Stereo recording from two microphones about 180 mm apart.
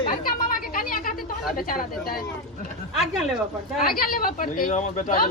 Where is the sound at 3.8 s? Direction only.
55° left (ahead or behind).